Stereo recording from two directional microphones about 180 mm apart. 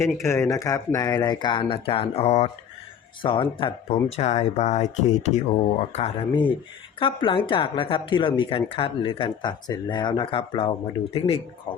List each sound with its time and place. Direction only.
0.0 s speech: 15° left (ahead or behind); by 11.3 s 30° left (ahead or behind)